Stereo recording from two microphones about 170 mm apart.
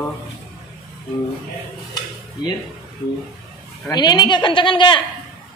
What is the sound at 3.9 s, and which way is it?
A woman's voice, 25° left (ahead or behind).